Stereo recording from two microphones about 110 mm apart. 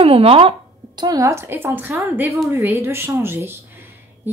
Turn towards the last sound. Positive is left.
turn(degrees=-20)  # may be behind; listen again after turning